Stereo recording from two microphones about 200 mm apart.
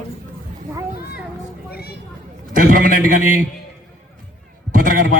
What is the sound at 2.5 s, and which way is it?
Speech, 45° right (ahead or behind).